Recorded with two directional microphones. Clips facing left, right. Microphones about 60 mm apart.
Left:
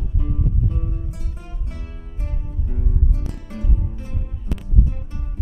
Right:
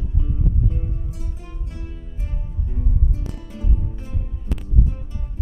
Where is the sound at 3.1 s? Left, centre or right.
Left.